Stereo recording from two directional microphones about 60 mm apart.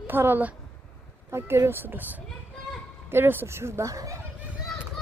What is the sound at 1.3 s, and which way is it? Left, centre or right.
Speech, right.